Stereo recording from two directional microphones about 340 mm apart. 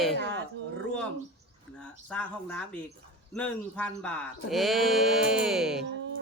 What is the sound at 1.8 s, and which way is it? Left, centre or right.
Speech, centre.